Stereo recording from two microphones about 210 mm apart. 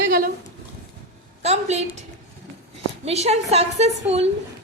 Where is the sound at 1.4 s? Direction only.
30° right (ahead or behind).